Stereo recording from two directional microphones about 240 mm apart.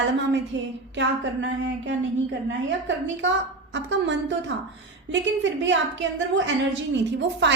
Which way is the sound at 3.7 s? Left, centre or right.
Right.